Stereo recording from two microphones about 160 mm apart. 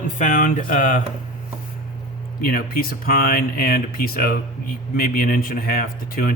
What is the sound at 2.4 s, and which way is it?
Speech, 65° left (ahead or behind).